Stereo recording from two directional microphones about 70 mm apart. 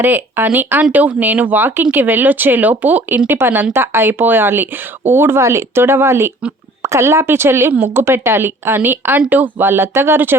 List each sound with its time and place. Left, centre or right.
0.0 s speech: right